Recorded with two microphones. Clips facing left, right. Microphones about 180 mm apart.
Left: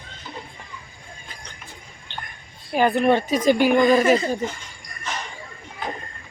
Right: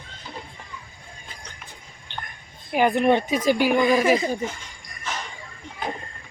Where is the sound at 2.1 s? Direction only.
15° right (ahead or behind).